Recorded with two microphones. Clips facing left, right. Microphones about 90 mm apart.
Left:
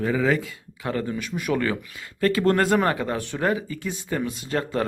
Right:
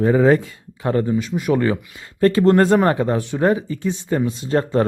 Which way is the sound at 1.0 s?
25° right (ahead or behind).